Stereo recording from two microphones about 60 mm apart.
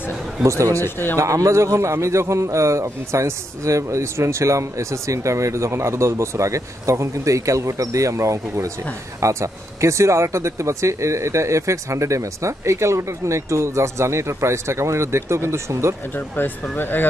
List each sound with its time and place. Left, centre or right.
0.4 s a man's voice: right
0.8 s speech: left
1.1 s a man's voice: right
16.2 s speech: left